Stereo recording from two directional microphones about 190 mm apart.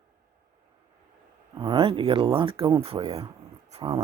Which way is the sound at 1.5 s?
25° right (ahead or behind).